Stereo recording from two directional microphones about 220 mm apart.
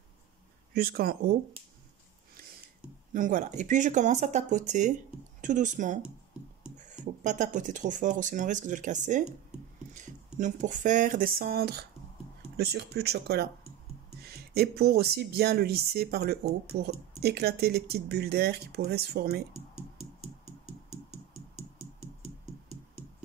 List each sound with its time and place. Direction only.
0.7 s speech: 45° right (ahead or behind)
3.1 s speech: 35° right (ahead or behind)
19.7 s music: centre (ahead or behind)